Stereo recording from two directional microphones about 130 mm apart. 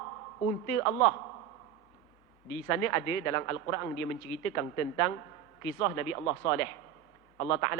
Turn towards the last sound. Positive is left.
turn(degrees=25)  # may be behind; listen again after turning